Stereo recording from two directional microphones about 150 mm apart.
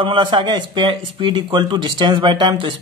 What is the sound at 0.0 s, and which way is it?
Speech, 35° right (ahead or behind).